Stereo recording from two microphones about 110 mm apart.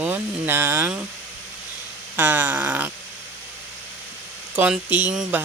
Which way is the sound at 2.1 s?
20° right (ahead or behind).